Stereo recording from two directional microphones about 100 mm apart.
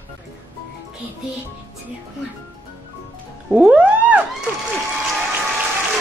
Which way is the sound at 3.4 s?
10° right (ahead or behind).